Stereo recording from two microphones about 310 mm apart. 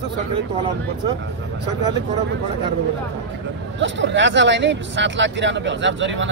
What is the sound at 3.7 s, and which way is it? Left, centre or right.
Speech, right.